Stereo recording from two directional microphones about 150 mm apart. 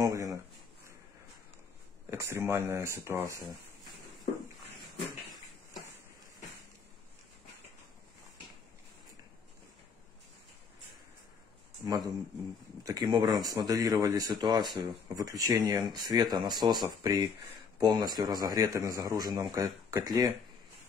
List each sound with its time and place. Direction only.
0.0 s a sound: 20° right (ahead or behind)
2.0 s speech: 20° right (ahead or behind)
11.8 s a man's voice: 25° right (ahead or behind)